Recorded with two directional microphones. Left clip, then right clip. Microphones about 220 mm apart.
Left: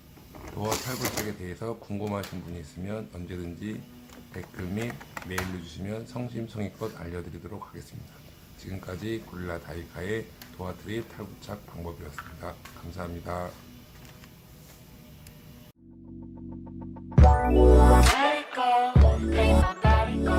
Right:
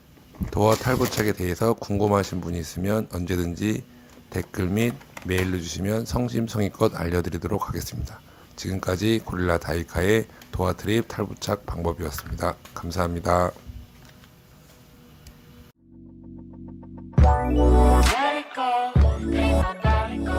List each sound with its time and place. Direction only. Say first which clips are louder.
0.9 s speech: right 9 dB; 40° right (ahead or behind)
17.2 s music: even; centre (ahead or behind)